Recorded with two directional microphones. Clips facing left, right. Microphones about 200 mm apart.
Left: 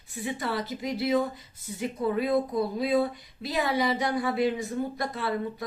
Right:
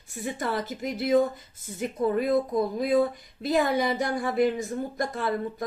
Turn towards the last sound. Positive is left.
turn(degrees=-45)  # may be behind; listen again after turning